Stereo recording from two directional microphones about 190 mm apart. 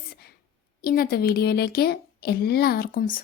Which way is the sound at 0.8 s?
50° left (ahead or behind).